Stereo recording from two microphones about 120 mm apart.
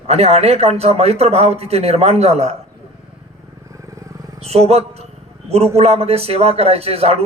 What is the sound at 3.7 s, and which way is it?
Vehicle, 25° right (ahead or behind).